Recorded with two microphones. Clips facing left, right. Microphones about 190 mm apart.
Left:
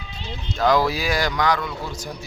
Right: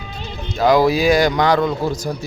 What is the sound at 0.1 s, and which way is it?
Music, 50° right (ahead or behind).